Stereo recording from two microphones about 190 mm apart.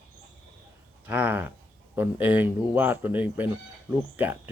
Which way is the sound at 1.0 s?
10° right (ahead or behind).